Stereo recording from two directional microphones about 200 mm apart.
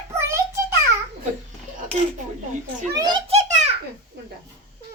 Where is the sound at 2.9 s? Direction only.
20° right (ahead or behind).